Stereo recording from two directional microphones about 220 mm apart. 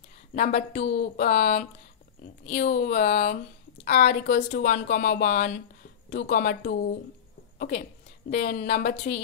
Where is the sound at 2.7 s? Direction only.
45° left (ahead or behind).